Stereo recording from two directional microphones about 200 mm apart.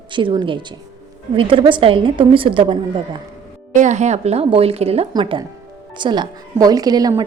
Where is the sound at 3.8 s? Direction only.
35° right (ahead or behind); by 7.3 s 20° right (ahead or behind).